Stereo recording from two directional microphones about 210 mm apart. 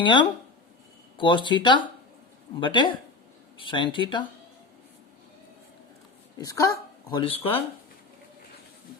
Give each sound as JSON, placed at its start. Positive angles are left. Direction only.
{"t": 0.0, "sound": "speech", "side_deg": 20}
{"t": 6.4, "sound": "speech", "side_deg": 15}